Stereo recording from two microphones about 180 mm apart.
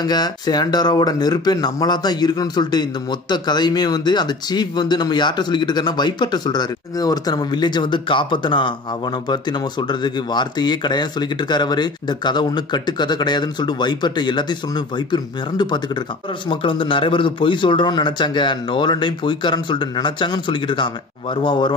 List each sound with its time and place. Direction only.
0.0 s speech: 25° left (ahead or behind)